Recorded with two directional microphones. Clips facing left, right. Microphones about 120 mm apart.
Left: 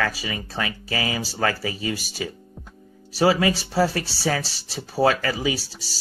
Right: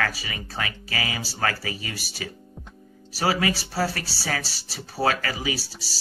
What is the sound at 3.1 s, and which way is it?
Speech, 25° left (ahead or behind).